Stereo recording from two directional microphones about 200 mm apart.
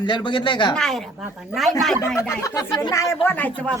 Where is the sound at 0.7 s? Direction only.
Centre (ahead or behind).